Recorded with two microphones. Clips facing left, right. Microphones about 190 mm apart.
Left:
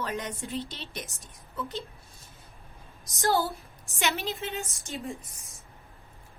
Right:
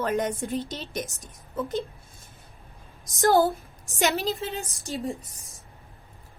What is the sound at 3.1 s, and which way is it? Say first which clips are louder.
Speech: right 7 dB; 50° right (ahead or behind).